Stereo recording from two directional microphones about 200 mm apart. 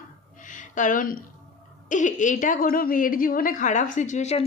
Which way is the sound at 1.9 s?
40° left (ahead or behind).